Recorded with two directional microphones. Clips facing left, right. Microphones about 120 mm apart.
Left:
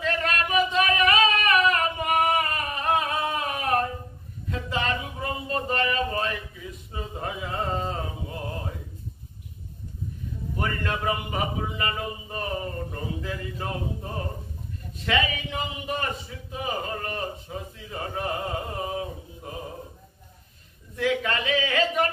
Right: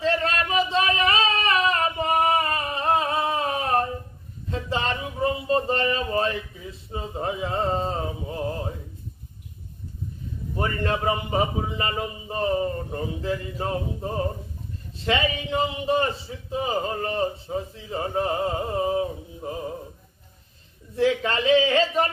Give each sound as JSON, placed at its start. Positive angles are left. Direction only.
{"t": 0.0, "sound": "a sound", "side_deg": -30}
{"t": 10.5, "sound": "a man's voice", "side_deg": -30}
{"t": 20.9, "sound": "a man's voice", "side_deg": -30}